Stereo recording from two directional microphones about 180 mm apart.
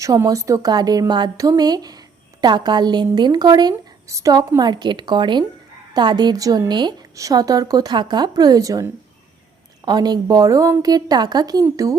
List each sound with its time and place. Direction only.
0.0 s speech: 20° right (ahead or behind)